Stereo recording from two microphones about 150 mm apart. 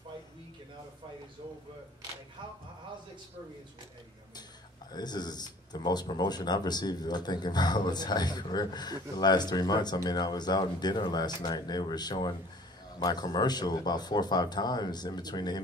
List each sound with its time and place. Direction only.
4.9 s speech: 30° left (ahead or behind)